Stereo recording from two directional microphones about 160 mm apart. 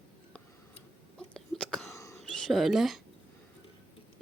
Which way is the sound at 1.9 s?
20° left (ahead or behind).